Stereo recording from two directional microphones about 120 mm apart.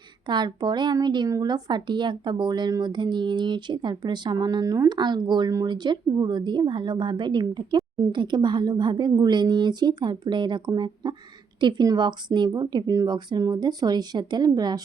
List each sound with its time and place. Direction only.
0.3 s a woman's voice: 40° right (ahead or behind)
8.1 s a woman's voice: 40° right (ahead or behind)